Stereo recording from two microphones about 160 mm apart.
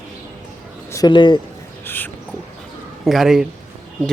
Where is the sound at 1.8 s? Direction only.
15° left (ahead or behind).